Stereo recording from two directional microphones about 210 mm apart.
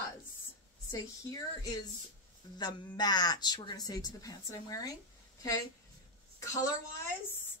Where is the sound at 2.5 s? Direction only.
20° left (ahead or behind).